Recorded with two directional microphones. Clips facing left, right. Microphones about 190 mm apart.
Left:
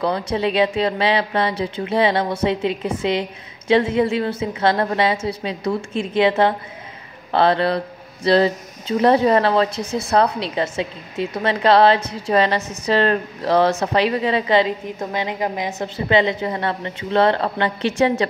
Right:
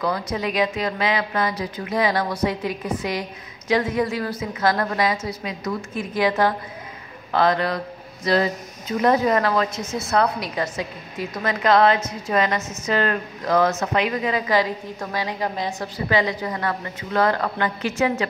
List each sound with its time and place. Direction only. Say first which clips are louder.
0.0 s speech: left 4 dB; 30° left (ahead or behind)